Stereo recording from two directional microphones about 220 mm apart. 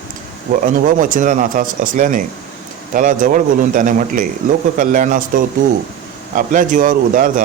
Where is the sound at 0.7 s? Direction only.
35° right (ahead or behind).